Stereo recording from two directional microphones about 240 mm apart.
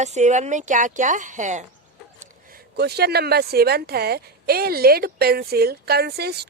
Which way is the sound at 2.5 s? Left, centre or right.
Right.